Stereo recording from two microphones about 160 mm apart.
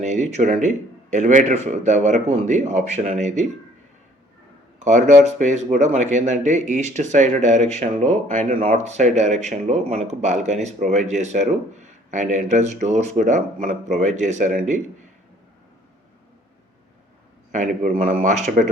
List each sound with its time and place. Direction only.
0.0 s speech: 45° right (ahead or behind)
4.8 s speech: 50° right (ahead or behind)
17.5 s speech: 45° right (ahead or behind)